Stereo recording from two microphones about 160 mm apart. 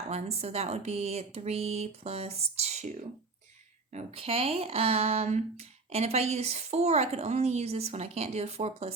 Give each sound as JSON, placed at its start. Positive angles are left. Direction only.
{"t": 0.1, "sound": "speech", "side_deg": -40}